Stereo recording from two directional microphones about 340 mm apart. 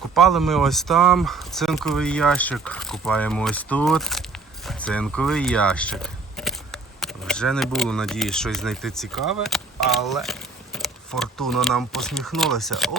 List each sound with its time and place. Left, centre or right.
0.1 s speech: centre